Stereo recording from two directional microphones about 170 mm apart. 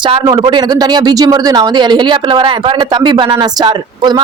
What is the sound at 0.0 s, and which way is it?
A man's voice, 30° right (ahead or behind).